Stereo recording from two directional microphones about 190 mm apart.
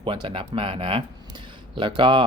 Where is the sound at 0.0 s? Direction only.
25° right (ahead or behind).